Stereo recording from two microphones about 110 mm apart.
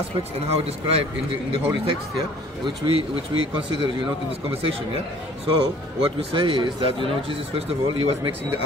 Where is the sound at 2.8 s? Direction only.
60° right (ahead or behind).